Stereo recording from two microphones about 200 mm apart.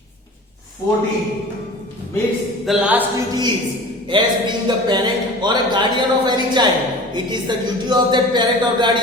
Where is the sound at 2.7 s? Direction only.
10° right (ahead or behind).